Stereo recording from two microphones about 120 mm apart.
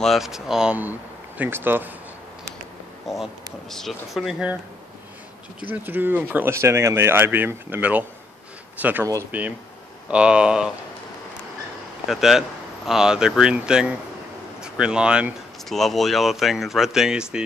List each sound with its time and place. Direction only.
0.0 s speech: centre (ahead or behind); by 1.9 s 15° right (ahead or behind)
3.1 s speech: centre (ahead or behind)
5.6 s speech: 15° right (ahead or behind)
12.1 s speech: centre (ahead or behind)